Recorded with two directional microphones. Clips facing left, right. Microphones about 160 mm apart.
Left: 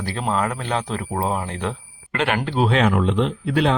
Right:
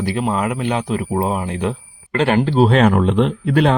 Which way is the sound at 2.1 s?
35° right (ahead or behind).